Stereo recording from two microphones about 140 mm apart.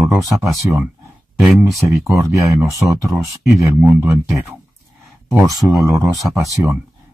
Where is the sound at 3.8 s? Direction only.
15° right (ahead or behind).